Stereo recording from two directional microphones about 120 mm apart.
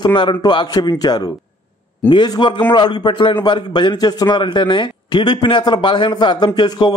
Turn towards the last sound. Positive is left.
turn(degrees=35)  # may be behind; listen again after turning